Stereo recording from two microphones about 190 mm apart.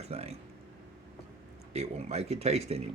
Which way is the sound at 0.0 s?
35° right (ahead or behind).